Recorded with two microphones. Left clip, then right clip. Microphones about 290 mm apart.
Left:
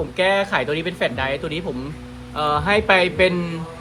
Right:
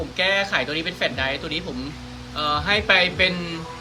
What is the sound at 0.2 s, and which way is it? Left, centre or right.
Speech, centre.